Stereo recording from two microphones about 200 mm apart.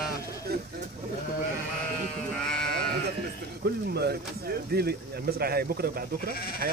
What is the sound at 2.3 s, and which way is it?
Sheep, 5° left (ahead or behind).